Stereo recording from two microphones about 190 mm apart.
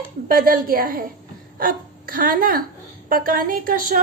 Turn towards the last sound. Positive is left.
turn(degrees=-50)  # may be behind; listen again after turning